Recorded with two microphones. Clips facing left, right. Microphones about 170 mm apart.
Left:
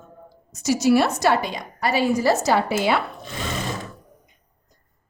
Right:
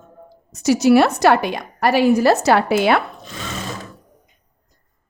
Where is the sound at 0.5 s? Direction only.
65° right (ahead or behind).